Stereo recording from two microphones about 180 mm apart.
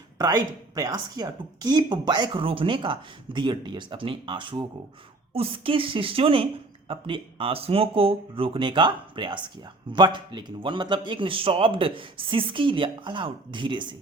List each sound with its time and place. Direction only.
0.2 s a woman's voice: 20° right (ahead or behind)